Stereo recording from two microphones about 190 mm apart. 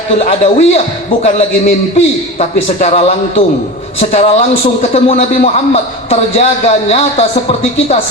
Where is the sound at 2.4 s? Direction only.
35° left (ahead or behind).